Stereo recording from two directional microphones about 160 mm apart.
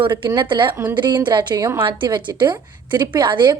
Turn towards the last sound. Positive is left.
turn(degrees=-30)  # may be behind; listen again after turning